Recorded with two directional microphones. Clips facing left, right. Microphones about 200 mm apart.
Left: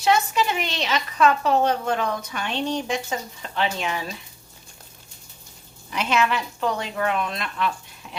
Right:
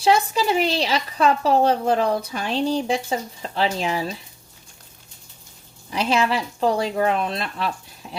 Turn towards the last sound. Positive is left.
turn(degrees=-35)  # may be behind; listen again after turning